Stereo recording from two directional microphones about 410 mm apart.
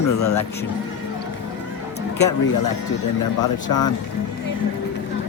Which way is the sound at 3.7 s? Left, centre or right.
Left.